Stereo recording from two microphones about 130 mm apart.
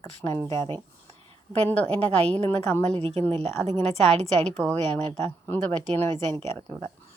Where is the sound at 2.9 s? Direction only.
50° right (ahead or behind).